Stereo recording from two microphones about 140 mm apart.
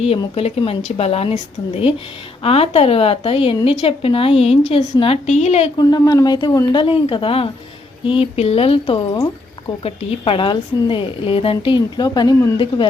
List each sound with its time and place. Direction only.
0.3 s a woman's voice: 45° left (ahead or behind)
5.7 s speech: 30° left (ahead or behind)